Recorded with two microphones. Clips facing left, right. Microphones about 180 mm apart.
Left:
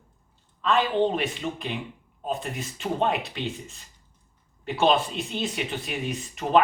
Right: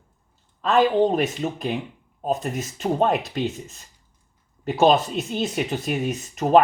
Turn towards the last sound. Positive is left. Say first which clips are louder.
# right 5 dB
turn(degrees=-45)  # may be behind; listen again after turning